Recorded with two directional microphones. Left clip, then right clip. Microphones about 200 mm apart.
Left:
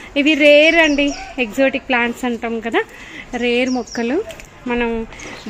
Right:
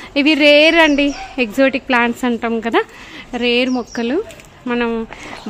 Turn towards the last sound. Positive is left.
turn(degrees=-15)  # may be behind; listen again after turning